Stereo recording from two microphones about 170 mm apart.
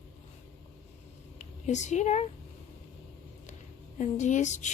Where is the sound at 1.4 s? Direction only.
45° left (ahead or behind).